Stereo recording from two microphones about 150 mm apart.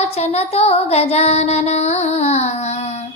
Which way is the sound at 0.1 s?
45° left (ahead or behind).